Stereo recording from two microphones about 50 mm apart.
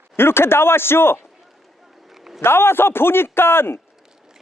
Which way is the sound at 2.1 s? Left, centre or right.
Centre.